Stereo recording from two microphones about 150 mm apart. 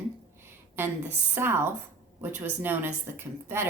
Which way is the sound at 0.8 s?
15° right (ahead or behind).